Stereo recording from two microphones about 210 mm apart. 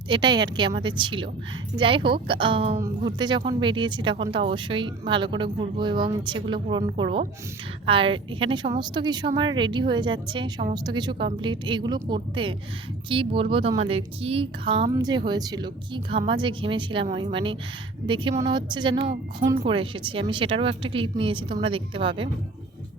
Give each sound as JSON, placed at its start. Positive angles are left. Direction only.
{"t": 0.1, "sound": "speech", "side_deg": -20}